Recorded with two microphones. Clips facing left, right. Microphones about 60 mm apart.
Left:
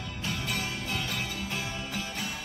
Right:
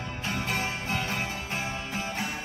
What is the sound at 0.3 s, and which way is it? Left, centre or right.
Music, right.